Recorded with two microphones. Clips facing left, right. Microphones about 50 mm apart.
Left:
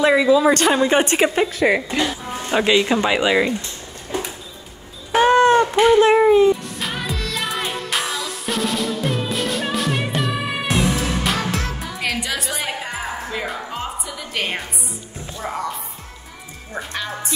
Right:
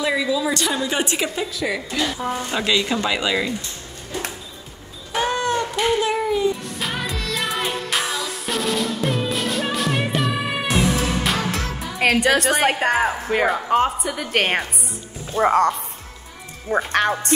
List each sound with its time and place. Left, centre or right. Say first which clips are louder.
0.0 s a woman's voice: left 7 dB; left
1.8 s speech: left 3 dB; left
2.2 s speech: right 3 dB; centre
2.5 s speech: left 7 dB; left
4.1 s a sound: left 2 dB; left
6.0 s a woman's voice: left 8 dB; left
6.8 s music: even; centre
12.0 s a woman's voice: right 8 dB; right
15.4 s speech: right 10 dB; right
16.7 s speech: right 9 dB; right